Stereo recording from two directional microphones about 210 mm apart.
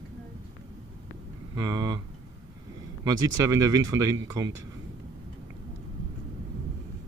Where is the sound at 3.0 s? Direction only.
20° right (ahead or behind).